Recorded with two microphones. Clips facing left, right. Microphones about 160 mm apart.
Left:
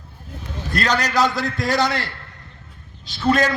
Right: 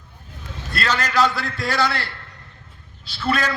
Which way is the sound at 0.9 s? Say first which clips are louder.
Even; 40° left (ahead or behind).